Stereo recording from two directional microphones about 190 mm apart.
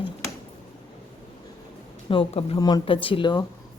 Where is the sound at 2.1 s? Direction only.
30° left (ahead or behind).